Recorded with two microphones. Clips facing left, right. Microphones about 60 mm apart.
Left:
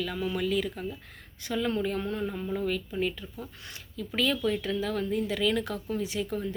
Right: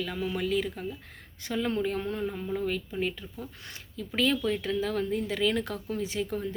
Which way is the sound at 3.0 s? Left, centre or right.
Right.